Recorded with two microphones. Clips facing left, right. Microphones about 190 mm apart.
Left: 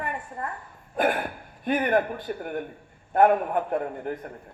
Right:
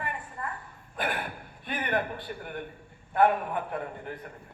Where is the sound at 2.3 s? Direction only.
45° left (ahead or behind).